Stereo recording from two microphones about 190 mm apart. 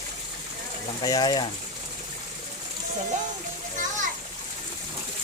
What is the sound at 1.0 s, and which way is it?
Speech, 20° left (ahead or behind).